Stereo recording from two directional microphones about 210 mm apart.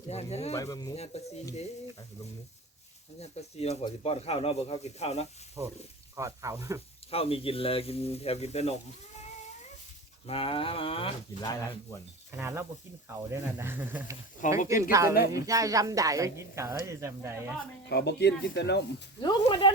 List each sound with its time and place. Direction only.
0.1 s speech: 30° left (ahead or behind)
0.5 s speech: 15° left (ahead or behind)
0.9 s speech: 30° left (ahead or behind)
3.2 s speech: 30° left (ahead or behind)
5.6 s speech: 15° right (ahead or behind)
7.1 s speech: 25° left (ahead or behind)
10.2 s speech: 25° left (ahead or behind)
12.4 s speech: 10° right (ahead or behind)
14.4 s speech: 40° left (ahead or behind)
14.8 s speech: 15° right (ahead or behind)
17.8 s speech: 55° left (ahead or behind)
19.2 s speech: 20° left (ahead or behind)